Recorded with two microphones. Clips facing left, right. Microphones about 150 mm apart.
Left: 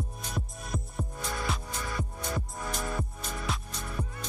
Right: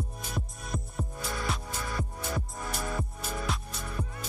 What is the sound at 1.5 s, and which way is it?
Music, centre (ahead or behind).